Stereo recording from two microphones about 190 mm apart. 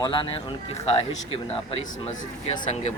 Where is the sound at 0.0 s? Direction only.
25° left (ahead or behind).